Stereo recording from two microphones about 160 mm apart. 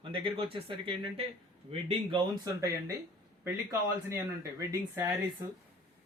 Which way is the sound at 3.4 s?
15° right (ahead or behind).